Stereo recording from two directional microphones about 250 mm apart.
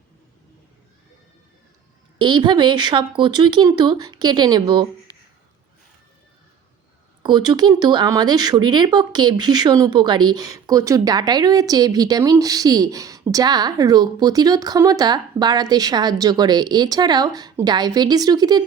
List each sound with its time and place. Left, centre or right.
2.1 s speech: centre
7.2 s speech: centre